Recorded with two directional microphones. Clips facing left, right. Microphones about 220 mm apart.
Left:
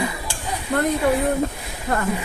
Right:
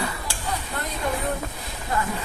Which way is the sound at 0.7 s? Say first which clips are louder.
Left 11 dB; 65° left (ahead or behind).